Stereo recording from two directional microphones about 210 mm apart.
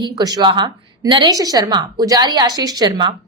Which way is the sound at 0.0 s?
20° right (ahead or behind).